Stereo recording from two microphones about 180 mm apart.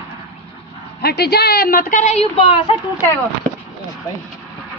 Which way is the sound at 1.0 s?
65° left (ahead or behind).